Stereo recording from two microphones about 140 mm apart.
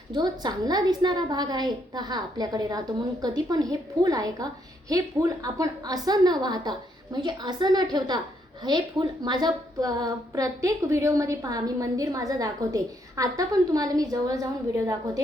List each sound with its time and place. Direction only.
0.1 s a woman's voice: 30° right (ahead or behind)